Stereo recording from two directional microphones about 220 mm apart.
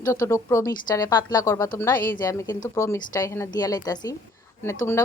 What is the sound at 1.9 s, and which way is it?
Speech, 40° left (ahead or behind).